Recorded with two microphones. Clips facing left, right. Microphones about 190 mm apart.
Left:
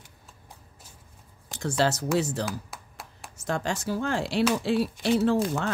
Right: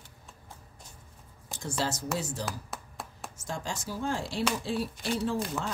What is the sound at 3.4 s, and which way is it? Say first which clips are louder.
Speech: left 8 dB; 65° left (ahead or behind).